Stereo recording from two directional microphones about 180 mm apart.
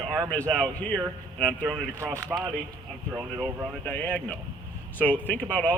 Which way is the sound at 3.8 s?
10° left (ahead or behind).